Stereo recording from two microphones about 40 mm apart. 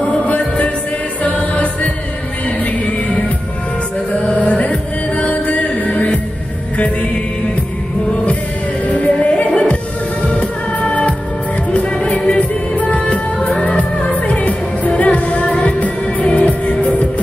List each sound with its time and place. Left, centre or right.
0.0 s music: left
4.4 s music: left
8.8 s music: left